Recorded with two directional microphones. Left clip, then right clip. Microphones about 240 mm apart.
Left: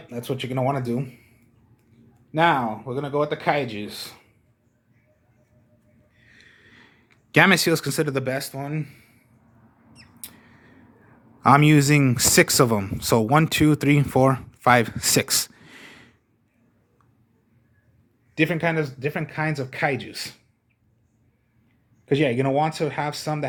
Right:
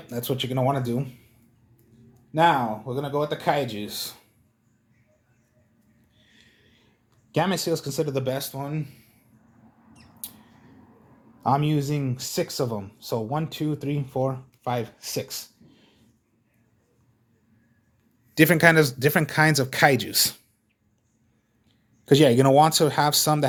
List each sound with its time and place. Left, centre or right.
0.1 s speech: centre
2.3 s speech: centre
6.3 s a sound: centre
7.4 s speech: left
9.9 s mouse: centre
11.4 s speech: left
18.3 s speech: right
22.0 s speech: right